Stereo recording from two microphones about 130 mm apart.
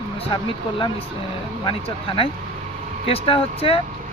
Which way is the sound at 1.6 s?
40° left (ahead or behind).